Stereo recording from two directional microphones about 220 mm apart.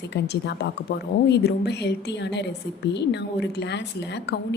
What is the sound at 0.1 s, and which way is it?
A woman's voice, 50° left (ahead or behind).